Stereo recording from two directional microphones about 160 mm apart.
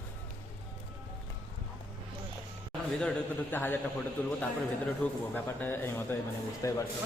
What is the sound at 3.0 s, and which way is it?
Speech, 10° left (ahead or behind).